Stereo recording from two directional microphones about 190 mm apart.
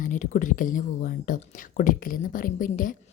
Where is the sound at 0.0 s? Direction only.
45° left (ahead or behind).